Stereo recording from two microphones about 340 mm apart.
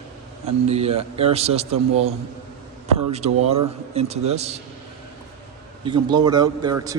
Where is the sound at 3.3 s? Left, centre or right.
Centre.